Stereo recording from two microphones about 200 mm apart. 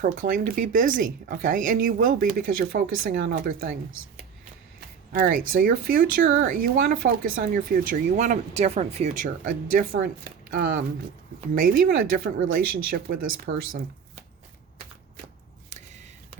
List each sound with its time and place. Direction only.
0.0 s speech: 45° right (ahead or behind)
5.1 s speech: 45° right (ahead or behind)